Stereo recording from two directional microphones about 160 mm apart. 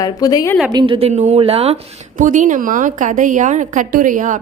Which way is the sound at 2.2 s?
55° right (ahead or behind).